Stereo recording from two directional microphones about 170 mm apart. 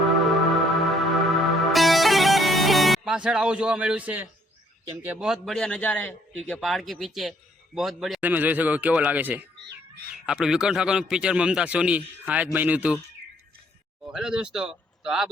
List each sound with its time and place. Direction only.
0.2 s music: centre (ahead or behind)
5.2 s a man's voice: centre (ahead or behind)
9.6 s cat: 85° right
10.2 s speech: 5° right (ahead or behind)
14.1 s speech: 5° right (ahead or behind)